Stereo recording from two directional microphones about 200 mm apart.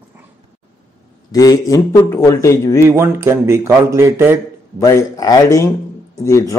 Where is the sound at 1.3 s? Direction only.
20° left (ahead or behind).